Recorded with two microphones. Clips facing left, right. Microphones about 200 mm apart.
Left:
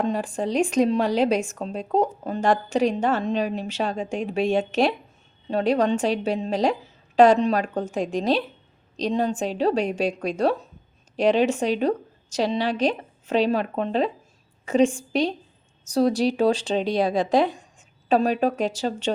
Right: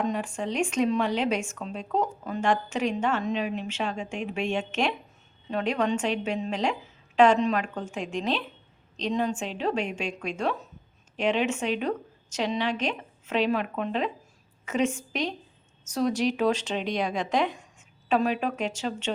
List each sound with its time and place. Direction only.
0.0 s a woman's voice: 35° left (ahead or behind)